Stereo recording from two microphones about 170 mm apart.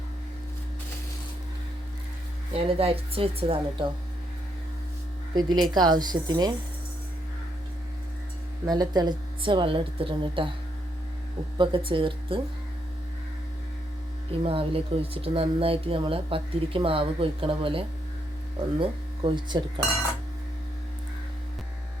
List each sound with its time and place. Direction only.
2.5 s speech: 35° right (ahead or behind)
5.3 s speech: 25° right (ahead or behind)
8.6 s speech: 25° right (ahead or behind)
11.5 s speech: 30° right (ahead or behind)
14.4 s speech: 35° right (ahead or behind)